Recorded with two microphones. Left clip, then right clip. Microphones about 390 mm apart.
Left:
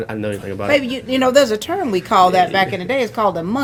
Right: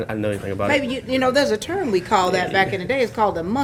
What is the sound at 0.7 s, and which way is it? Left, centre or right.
A woman's voice, left.